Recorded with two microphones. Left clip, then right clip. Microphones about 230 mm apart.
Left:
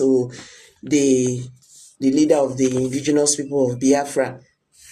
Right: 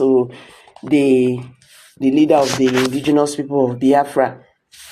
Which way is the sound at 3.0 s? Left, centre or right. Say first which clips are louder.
Right 3 dB; centre.